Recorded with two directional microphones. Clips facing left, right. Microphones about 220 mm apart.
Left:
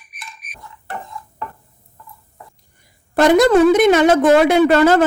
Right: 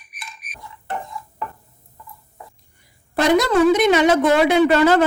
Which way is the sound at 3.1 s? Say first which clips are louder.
Left 5 dB; 50° left (ahead or behind).